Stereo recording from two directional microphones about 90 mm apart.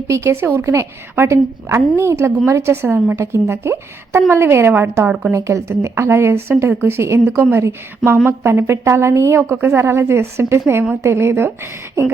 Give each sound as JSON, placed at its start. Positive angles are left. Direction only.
{"t": 0.1, "sound": "a woman's voice", "side_deg": -30}
{"t": 5.3, "sound": "a woman's voice", "side_deg": -35}
{"t": 10.7, "sound": "a woman's voice", "side_deg": -15}
{"t": 11.0, "sound": "a woman's voice", "side_deg": -30}